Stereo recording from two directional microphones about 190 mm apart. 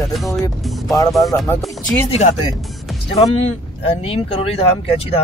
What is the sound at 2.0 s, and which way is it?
Speech, 35° left (ahead or behind).